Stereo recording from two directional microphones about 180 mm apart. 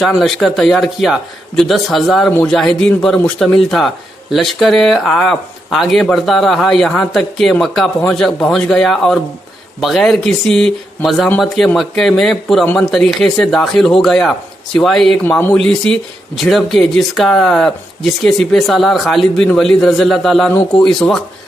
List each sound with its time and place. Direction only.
0.0 s a man's voice: centre (ahead or behind)